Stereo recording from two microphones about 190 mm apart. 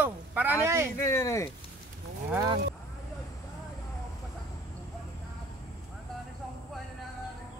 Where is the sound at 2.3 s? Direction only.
25° right (ahead or behind).